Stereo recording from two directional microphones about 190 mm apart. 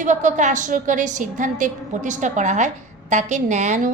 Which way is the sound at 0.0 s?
40° right (ahead or behind).